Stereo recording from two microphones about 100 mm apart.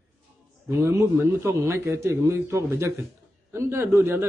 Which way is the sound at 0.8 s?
25° right (ahead or behind).